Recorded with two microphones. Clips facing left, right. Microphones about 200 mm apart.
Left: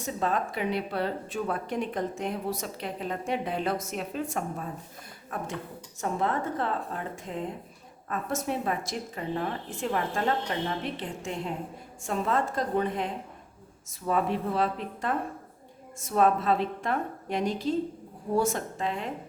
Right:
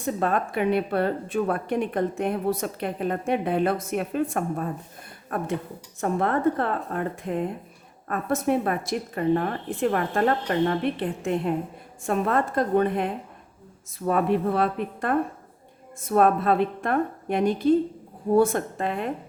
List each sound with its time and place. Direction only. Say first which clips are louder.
0.0 s speech: right 4 dB; 55° right (ahead or behind)